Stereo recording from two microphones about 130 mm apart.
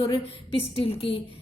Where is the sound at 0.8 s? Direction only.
45° left (ahead or behind).